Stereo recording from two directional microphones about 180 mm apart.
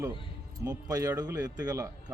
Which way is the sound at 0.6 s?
20° right (ahead or behind).